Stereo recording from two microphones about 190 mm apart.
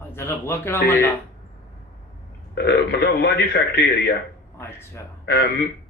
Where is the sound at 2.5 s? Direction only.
60° left (ahead or behind).